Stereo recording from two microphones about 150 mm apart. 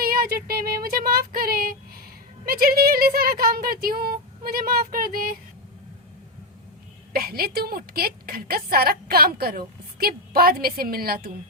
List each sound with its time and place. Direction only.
0.0 s a sound: 85° right
2.5 s speech: 75° right (ahead or behind)
7.1 s a woman's voice: 90° right